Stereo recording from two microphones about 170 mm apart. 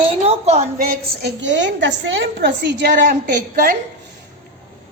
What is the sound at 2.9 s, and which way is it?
Speech, 50° right (ahead or behind).